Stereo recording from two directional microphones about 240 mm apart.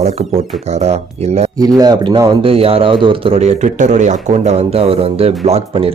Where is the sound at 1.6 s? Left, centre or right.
Centre.